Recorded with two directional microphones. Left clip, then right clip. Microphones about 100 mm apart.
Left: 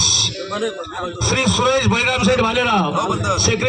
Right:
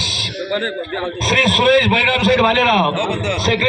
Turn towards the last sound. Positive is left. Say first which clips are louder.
# right 2 dB
turn(degrees=65)  # may be behind; listen again after turning